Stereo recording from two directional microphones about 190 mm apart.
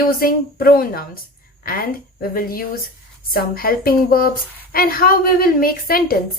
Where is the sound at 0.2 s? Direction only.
50° left (ahead or behind).